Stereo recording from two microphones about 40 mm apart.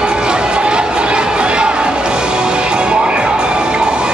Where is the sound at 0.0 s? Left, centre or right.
Right.